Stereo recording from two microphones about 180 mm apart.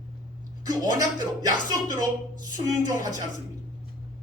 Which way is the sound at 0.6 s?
20° right (ahead or behind).